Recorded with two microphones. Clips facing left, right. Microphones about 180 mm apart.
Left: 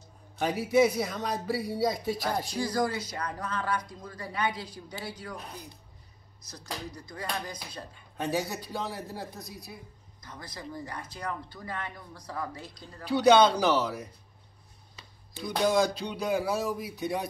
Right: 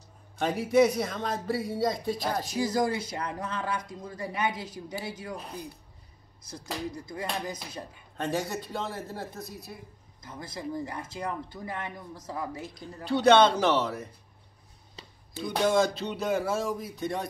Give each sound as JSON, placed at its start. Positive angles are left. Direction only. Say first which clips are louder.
{"t": 0.4, "sound": "speech", "louder": "right 1 dB", "side_deg": 5}
{"t": 2.4, "sound": "speech", "louder": "right 2 dB", "side_deg": -20}
{"t": 6.5, "sound": "speech", "louder": "right 4 dB", "side_deg": -25}
{"t": 8.2, "sound": "speech", "louder": "even", "side_deg": 5}
{"t": 10.2, "sound": "speech", "louder": "right 5 dB", "side_deg": -25}
{"t": 13.0, "sound": "speech", "louder": "even", "side_deg": 5}
{"t": 15.5, "sound": "speech", "louder": "right 1 dB", "side_deg": 0}